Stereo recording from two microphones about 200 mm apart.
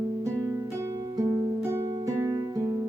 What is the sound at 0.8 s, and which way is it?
Music, 15° right (ahead or behind).